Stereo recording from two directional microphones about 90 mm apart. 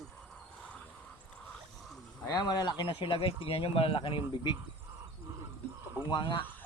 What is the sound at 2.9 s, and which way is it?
Speech, 85° left.